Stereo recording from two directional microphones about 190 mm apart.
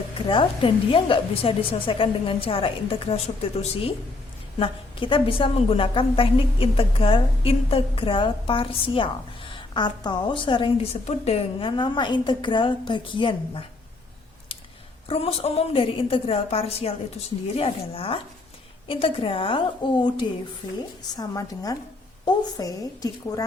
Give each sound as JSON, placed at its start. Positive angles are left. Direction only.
{"t": 0.3, "sound": "a woman's voice", "side_deg": 25}
{"t": 15.0, "sound": "a woman's voice", "side_deg": 30}